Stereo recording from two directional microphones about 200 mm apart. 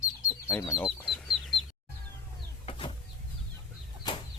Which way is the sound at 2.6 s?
25° left (ahead or behind).